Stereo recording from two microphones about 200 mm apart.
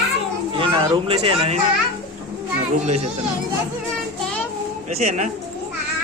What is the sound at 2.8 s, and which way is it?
Speech, 35° right (ahead or behind).